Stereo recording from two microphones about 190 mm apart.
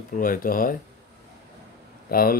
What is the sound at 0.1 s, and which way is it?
Speech, 45° left (ahead or behind).